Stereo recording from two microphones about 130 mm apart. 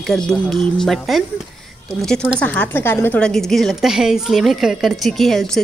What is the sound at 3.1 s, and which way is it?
Speech, 5° left (ahead or behind).